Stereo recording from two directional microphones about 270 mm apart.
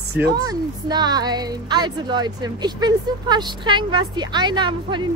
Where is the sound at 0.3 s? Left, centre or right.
Centre.